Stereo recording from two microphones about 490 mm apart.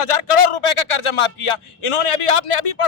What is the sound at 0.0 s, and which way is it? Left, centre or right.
A man's voice, left.